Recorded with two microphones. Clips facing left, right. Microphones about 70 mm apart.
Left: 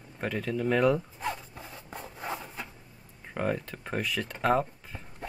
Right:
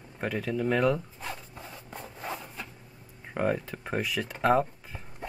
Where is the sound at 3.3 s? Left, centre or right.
Centre.